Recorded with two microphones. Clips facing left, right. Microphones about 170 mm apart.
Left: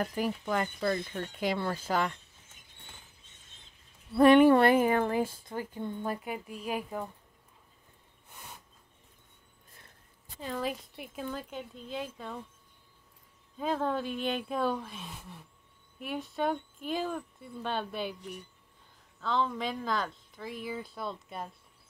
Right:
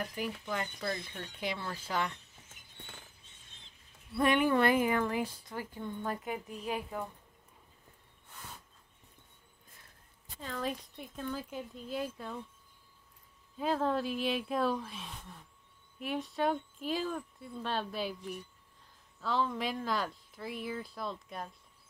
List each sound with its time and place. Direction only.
0.0 s speech: 50° left (ahead or behind)
4.2 s speech: 35° left (ahead or behind)
4.6 s speech: 45° left (ahead or behind)
6.0 s speech: 10° left (ahead or behind)
10.4 s speech: 10° left (ahead or behind)
13.6 s speech: centre (ahead or behind)